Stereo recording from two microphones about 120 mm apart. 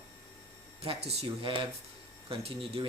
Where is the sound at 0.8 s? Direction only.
55° right (ahead or behind).